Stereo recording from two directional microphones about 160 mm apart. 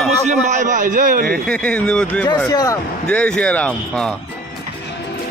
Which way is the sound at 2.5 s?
25° left (ahead or behind).